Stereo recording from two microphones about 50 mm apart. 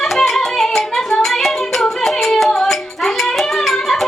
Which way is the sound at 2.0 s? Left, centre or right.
Centre.